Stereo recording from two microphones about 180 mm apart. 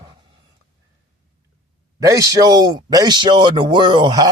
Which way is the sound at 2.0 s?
20° right (ahead or behind).